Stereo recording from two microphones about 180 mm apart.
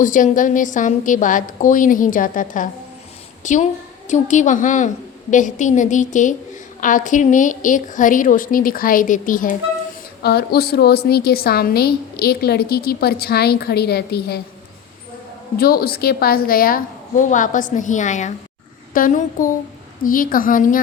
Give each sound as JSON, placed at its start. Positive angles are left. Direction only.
{"t": 0.0, "sound": "a woman's voice", "side_deg": 45}
{"t": 10.2, "sound": "a woman's voice", "side_deg": 60}
{"t": 15.5, "sound": "a woman's voice", "side_deg": 55}